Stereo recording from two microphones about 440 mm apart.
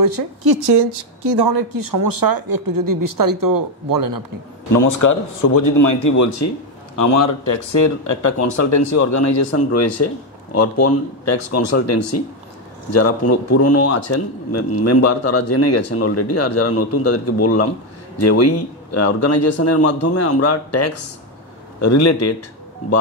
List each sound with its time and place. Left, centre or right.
0.0 s a woman's voice: right
4.7 s speech: left